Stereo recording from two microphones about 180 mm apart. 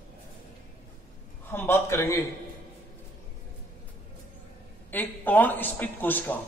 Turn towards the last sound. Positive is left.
turn(degrees=10)  # may be behind; listen again after turning